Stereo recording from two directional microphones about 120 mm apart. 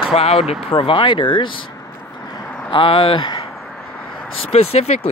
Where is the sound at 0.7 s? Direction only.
45° left (ahead or behind).